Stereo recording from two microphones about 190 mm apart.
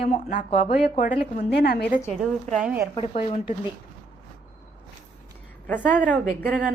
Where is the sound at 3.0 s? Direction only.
30° left (ahead or behind).